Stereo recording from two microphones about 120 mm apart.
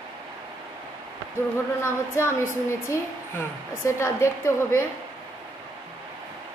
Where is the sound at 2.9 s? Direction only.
25° left (ahead or behind).